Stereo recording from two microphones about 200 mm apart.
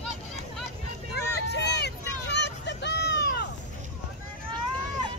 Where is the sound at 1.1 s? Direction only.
55° left (ahead or behind).